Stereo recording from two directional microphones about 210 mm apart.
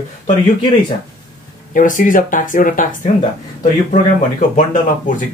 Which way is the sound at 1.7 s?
40° left (ahead or behind).